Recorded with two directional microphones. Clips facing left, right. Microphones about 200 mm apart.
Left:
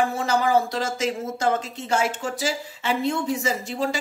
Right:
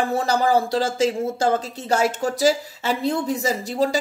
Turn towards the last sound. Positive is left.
turn(degrees=-35)  # may be behind; listen again after turning